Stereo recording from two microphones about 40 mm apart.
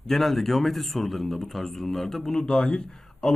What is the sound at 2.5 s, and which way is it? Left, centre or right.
Speech, left.